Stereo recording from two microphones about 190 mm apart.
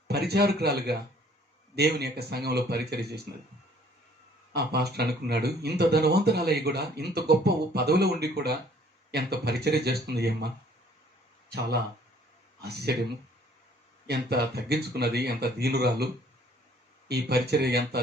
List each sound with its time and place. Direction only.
0.1 s speech: 60° right (ahead or behind)
4.5 s speech: 60° right (ahead or behind)
12.6 s speech: 60° right (ahead or behind)
14.1 s speech: 60° right (ahead or behind)
17.1 s speech: 60° right (ahead or behind)